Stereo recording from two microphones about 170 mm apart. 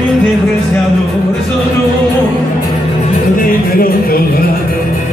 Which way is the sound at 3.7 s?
60° left (ahead or behind).